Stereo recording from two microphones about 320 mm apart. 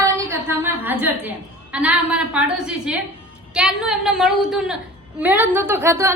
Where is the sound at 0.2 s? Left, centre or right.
Centre.